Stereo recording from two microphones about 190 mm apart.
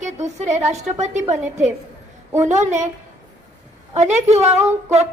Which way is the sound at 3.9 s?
35° right (ahead or behind).